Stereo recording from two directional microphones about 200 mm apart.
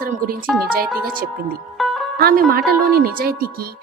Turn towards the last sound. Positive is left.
turn(degrees=-45)  # may be behind; listen again after turning